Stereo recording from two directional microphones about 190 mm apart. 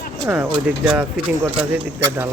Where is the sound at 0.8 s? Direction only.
5° right (ahead or behind).